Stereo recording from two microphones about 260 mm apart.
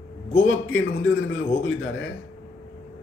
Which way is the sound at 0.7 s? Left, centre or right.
Left.